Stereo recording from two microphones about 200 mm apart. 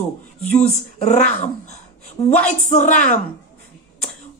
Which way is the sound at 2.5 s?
40° left (ahead or behind).